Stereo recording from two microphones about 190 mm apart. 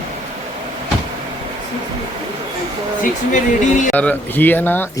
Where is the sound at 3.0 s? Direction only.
40° left (ahead or behind).